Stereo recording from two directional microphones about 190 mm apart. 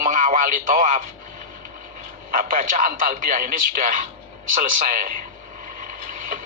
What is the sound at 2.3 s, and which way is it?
A man's voice, 45° right (ahead or behind).